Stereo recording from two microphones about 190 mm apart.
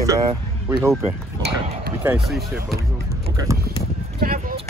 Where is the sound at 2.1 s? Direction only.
Centre (ahead or behind).